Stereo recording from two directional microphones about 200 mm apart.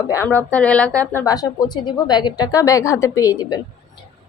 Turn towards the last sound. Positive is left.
turn(degrees=20)  # may be behind; listen again after turning